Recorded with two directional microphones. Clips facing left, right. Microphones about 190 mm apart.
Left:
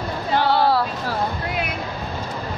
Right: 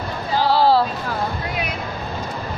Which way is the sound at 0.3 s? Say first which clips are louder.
Right 1 dB; 60° left (ahead or behind).